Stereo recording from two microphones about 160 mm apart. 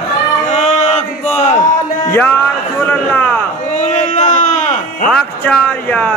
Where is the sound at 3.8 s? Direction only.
45° left (ahead or behind).